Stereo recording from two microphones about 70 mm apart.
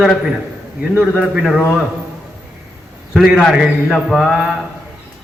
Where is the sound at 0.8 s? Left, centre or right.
Right.